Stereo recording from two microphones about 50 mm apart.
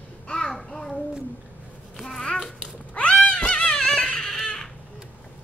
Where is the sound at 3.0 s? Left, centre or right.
Left.